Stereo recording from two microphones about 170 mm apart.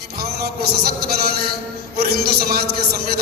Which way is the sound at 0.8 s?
70° right (ahead or behind).